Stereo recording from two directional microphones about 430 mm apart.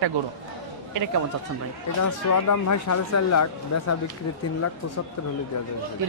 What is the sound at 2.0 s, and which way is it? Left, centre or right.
Speech, left.